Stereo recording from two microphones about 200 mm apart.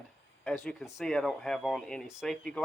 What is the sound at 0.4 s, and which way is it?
Speech, centre (ahead or behind).